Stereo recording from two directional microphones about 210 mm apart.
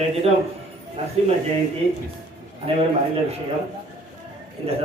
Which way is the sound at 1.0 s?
25° right (ahead or behind).